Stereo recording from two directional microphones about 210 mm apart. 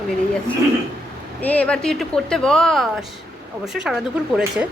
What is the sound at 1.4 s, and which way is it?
A woman's voice, 5° left (ahead or behind).